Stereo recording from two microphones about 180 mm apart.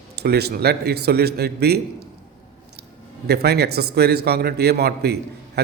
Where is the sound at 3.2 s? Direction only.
65° right (ahead or behind).